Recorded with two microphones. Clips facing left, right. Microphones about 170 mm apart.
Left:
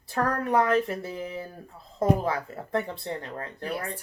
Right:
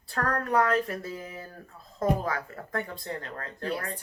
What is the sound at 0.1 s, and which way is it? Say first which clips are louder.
Speech: left 2 dB; 20° left (ahead or behind).